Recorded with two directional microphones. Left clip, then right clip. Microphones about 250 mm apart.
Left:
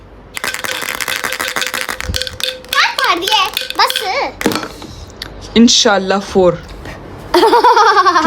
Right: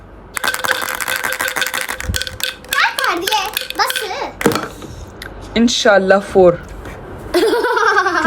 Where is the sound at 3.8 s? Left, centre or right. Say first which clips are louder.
Left 5 dB; centre.